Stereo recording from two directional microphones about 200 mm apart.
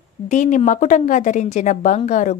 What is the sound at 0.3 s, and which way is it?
A woman's voice, 40° left (ahead or behind).